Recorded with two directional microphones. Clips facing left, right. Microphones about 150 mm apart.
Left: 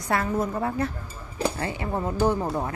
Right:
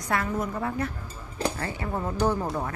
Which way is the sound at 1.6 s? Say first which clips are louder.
Left 2 dB; 20° left (ahead or behind).